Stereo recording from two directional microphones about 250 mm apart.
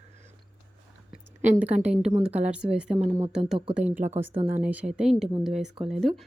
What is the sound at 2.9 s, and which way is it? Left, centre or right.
Speech, right.